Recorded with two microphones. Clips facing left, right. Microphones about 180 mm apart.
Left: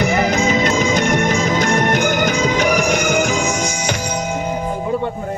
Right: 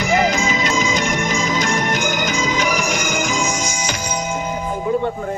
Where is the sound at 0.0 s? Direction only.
60° left (ahead or behind).